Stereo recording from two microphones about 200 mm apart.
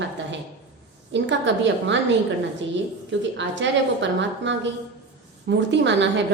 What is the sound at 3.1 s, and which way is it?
A woman's voice, 65° right (ahead or behind).